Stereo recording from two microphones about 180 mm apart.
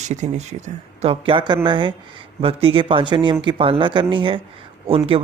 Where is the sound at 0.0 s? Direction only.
40° right (ahead or behind).